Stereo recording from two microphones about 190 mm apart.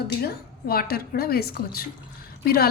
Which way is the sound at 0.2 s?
50° left (ahead or behind).